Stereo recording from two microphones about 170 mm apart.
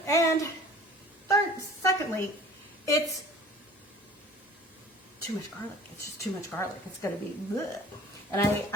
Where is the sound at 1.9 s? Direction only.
15° left (ahead or behind).